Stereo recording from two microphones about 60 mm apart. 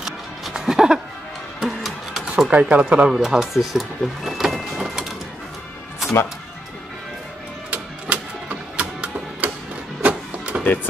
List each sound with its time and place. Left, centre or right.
0.0 s music: centre
2.3 s speech: right
3.1 s speech: centre
7.7 s music: right